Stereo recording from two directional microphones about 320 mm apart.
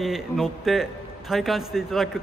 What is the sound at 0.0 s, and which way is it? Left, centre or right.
A woman's voice, centre.